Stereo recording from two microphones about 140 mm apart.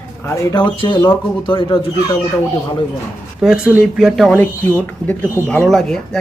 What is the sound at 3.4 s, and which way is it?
Speech, 5° right (ahead or behind).